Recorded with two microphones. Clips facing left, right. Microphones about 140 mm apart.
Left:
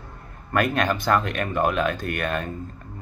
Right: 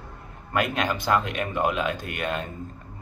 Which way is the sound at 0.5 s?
15° right (ahead or behind).